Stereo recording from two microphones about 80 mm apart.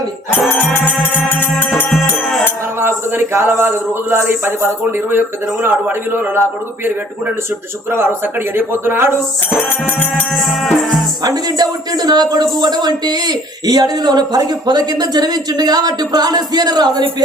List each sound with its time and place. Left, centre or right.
3.3 s speech: right
7.9 s speech: right
9.5 s music: left
10.3 s music: centre
11.2 s a man's voice: right